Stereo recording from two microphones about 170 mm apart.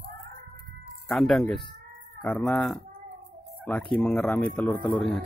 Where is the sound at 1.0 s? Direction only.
5° left (ahead or behind).